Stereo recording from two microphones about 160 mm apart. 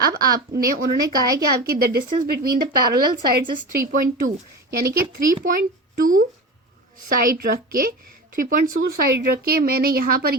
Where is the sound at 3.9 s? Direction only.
55° right (ahead or behind); by 5.0 s 75° right (ahead or behind).